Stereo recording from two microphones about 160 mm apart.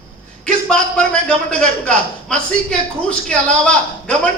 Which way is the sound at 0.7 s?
5° left (ahead or behind).